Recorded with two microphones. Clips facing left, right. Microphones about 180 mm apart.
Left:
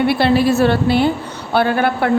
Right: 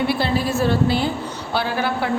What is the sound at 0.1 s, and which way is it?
A woman's voice, 70° left (ahead or behind).